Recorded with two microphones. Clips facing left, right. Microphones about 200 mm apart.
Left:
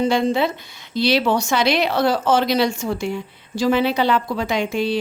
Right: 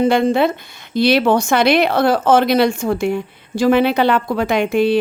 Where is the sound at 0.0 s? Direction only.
55° right (ahead or behind).